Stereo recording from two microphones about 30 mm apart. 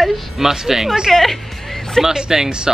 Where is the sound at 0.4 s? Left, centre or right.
Centre.